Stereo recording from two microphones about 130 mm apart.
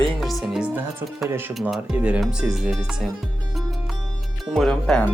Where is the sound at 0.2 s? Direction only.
Centre (ahead or behind).